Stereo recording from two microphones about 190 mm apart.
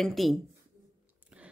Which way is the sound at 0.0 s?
Centre (ahead or behind).